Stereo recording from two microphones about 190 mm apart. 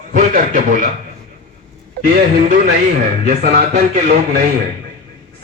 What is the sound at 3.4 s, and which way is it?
Speech, 45° right (ahead or behind).